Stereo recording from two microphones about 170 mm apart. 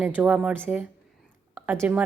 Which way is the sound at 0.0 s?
5° right (ahead or behind).